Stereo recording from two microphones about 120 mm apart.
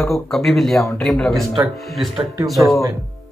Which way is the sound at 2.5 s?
Centre (ahead or behind).